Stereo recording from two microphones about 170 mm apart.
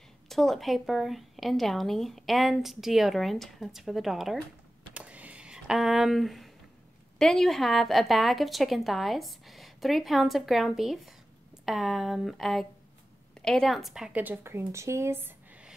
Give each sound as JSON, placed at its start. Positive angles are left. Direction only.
{"t": 0.3, "sound": "a woman's voice", "side_deg": 0}
{"t": 4.9, "sound": "a sound", "side_deg": -10}
{"t": 7.2, "sound": "a woman's voice", "side_deg": 5}